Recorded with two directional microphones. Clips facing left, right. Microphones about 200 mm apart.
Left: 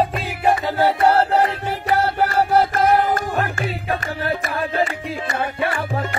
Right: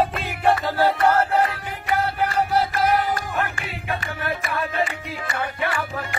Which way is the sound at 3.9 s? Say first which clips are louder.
Left 2 dB; 35° left (ahead or behind).